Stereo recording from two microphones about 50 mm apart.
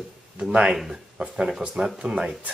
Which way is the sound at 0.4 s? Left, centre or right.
Right.